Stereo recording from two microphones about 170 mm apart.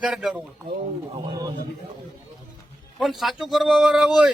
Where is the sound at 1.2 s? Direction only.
25° right (ahead or behind).